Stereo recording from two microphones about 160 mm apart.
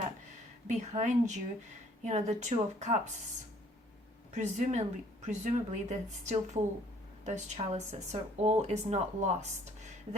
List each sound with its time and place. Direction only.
0.7 s speech: 50° right (ahead or behind)
4.4 s speech: 45° right (ahead or behind)